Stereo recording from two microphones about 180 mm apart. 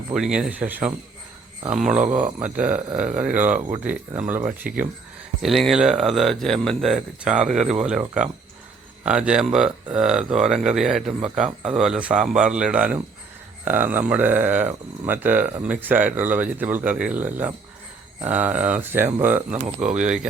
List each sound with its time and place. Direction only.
0.1 s speech: 5° right (ahead or behind)
1.6 s speech: 40° right (ahead or behind)
2.4 s speech: 10° right (ahead or behind)
5.4 s speech: centre (ahead or behind)
19.5 s speech: 45° right (ahead or behind)